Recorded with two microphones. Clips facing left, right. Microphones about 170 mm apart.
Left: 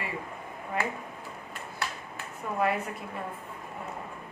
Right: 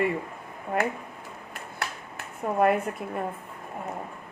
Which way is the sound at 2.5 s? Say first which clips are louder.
Right 6 dB; 50° right (ahead or behind).